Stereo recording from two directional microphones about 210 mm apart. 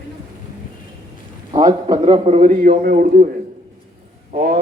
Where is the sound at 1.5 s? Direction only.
20° right (ahead or behind).